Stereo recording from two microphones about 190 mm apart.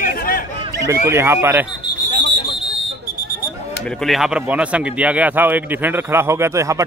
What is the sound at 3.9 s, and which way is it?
Speech, centre (ahead or behind).